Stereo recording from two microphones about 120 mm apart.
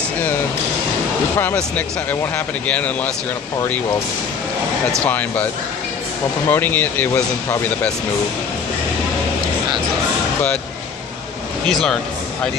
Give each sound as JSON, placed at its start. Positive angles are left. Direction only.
{"t": 1.4, "sound": "speech", "side_deg": 15}
{"t": 5.0, "sound": "speech", "side_deg": 15}
{"t": 6.5, "sound": "speech", "side_deg": 15}
{"t": 11.6, "sound": "speech", "side_deg": 5}